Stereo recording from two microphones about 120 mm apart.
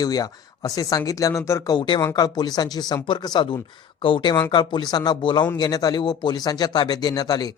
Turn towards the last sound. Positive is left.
turn(degrees=30)  # may be behind; listen again after turning